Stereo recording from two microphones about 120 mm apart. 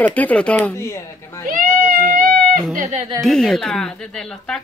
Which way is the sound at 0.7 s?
25° left (ahead or behind).